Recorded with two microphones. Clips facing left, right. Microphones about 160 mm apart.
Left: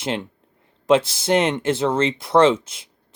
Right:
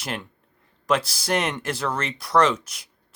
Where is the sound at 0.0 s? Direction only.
25° left (ahead or behind).